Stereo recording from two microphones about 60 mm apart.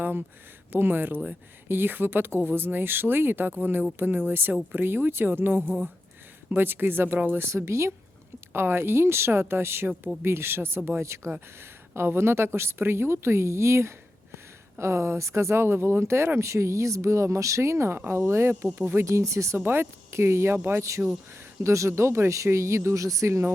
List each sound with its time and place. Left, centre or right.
0.7 s speech: right
7.4 s speech: right
11.0 s speech: right
11.3 s speech: right
19.0 s speech: right
19.5 s speech: right
20.1 s speech: right
21.0 s speech: right
21.6 s speech: right